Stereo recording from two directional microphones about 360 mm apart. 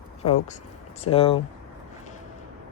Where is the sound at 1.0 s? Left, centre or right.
Centre.